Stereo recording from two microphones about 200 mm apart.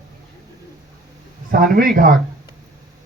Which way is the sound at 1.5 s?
45° right (ahead or behind).